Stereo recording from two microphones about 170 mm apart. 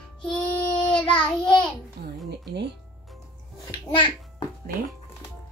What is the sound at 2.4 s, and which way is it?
Speech, 80° right.